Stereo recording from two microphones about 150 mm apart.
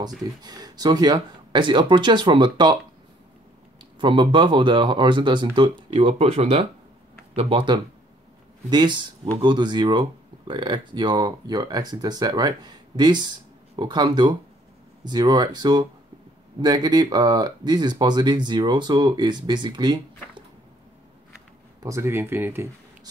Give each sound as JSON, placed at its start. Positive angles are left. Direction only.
{"t": 0.4, "sound": "speech", "side_deg": -25}
{"t": 4.0, "sound": "speech", "side_deg": -30}
{"t": 21.8, "sound": "speech", "side_deg": -20}